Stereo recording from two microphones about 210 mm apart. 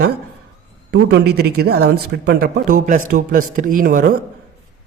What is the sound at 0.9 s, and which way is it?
Speech, 50° right (ahead or behind).